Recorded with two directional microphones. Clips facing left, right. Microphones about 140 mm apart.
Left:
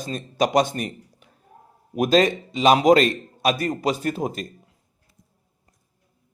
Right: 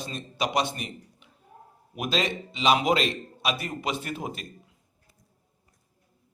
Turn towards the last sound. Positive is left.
turn(degrees=40)  # may be behind; listen again after turning